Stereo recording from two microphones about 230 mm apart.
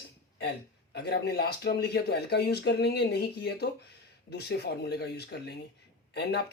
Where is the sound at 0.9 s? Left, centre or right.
Left.